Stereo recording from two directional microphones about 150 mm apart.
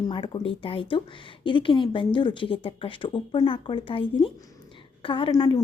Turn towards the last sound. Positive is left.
turn(degrees=30)  # may be behind; listen again after turning